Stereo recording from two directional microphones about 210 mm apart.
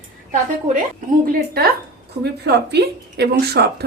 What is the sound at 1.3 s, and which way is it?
Speech, 45° right (ahead or behind).